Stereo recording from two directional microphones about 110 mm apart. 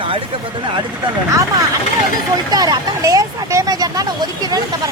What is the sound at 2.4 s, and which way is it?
Speech, 40° right (ahead or behind).